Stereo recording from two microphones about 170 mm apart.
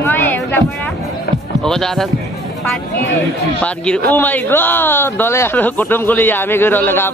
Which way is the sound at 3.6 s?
5° left (ahead or behind).